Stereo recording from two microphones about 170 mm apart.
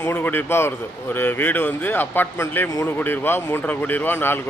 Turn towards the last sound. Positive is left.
turn(degrees=10)  # may be behind; listen again after turning